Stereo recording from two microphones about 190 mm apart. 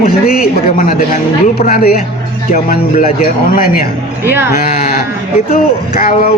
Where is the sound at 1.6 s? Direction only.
50° left (ahead or behind).